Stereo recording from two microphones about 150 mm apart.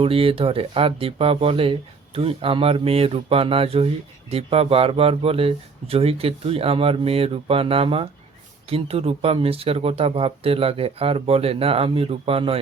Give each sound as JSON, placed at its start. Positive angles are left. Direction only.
{"t": 0.0, "sound": "speech", "side_deg": -40}